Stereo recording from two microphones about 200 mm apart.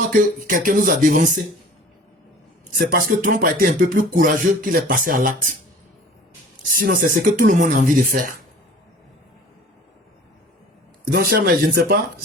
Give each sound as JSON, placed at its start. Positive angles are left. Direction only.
{"t": 0.1, "sound": "speech", "side_deg": -40}
{"t": 2.7, "sound": "speech", "side_deg": -45}
{"t": 6.7, "sound": "speech", "side_deg": -45}
{"t": 11.0, "sound": "speech", "side_deg": -50}